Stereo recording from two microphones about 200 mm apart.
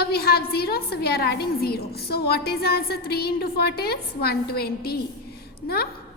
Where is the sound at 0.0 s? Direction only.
50° left (ahead or behind).